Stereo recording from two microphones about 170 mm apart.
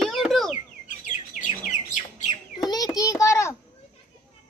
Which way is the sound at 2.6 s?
25° left (ahead or behind).